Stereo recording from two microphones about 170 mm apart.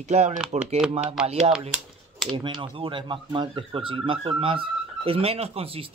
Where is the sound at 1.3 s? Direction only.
35° right (ahead or behind).